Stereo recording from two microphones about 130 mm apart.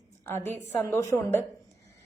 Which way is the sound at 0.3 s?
15° left (ahead or behind).